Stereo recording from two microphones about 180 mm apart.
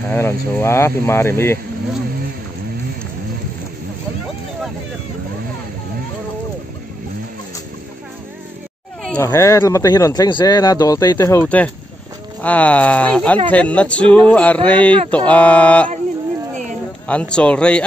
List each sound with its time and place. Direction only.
0.1 s speech: 15° left (ahead or behind)
9.2 s speech: 15° left (ahead or behind)
17.1 s speech: 5° left (ahead or behind)